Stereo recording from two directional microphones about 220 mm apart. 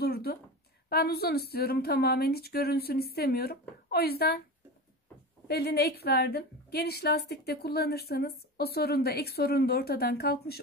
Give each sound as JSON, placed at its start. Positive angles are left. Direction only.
{"t": 0.0, "sound": "a sound", "side_deg": 45}
{"t": 0.8, "sound": "a woman's voice", "side_deg": 45}
{"t": 5.5, "sound": "a woman's voice", "side_deg": 45}